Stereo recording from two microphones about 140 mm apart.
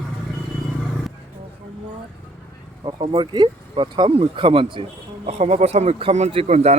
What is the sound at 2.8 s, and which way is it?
Speech, 35° right (ahead or behind).